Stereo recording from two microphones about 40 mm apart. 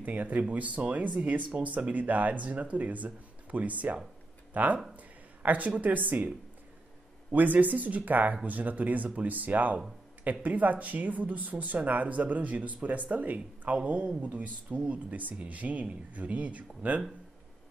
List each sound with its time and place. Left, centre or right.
0.0 s speech: right
4.9 s a sound: right
5.8 s speech: right
7.3 s speech: right